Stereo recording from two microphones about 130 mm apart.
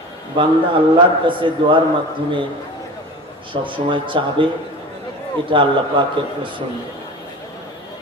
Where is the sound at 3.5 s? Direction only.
40° right (ahead or behind).